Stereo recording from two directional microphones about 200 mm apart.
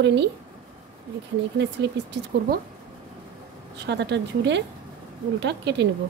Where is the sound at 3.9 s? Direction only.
60° right (ahead or behind).